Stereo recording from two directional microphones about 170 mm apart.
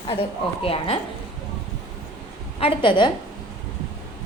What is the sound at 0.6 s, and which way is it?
Speech, 35° left (ahead or behind).